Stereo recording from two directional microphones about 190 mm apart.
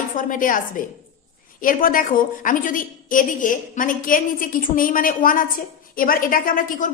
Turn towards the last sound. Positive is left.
turn(degrees=45)  # may be behind; listen again after turning